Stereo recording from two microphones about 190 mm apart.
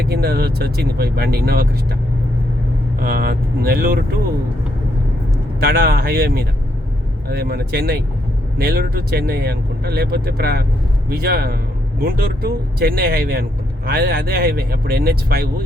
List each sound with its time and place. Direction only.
0.1 s speech: 55° right (ahead or behind)
3.0 s speech: 50° right (ahead or behind)
5.5 s speech: 55° right (ahead or behind)